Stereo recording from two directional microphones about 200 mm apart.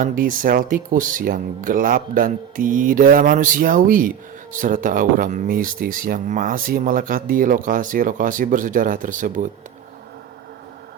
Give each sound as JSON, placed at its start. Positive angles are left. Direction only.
{"t": 0.0, "sound": "speech", "side_deg": -45}